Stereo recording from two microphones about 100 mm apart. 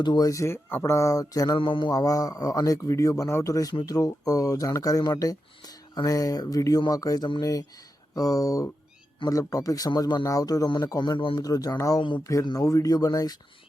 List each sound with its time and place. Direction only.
0.0 s speech: 45° left (ahead or behind)
0.3 s speech: 30° left (ahead or behind)
1.5 s speech: 55° left (ahead or behind)
1.9 s speech: 35° left (ahead or behind); by 11.3 s 55° left (ahead or behind)
11.3 s speech: 40° left (ahead or behind)